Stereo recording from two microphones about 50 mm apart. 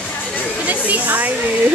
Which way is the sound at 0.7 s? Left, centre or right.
Right.